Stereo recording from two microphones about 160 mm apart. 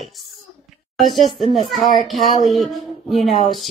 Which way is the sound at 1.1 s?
30° left (ahead or behind).